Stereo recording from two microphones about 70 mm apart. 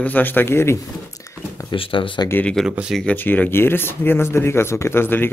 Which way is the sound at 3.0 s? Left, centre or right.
Left.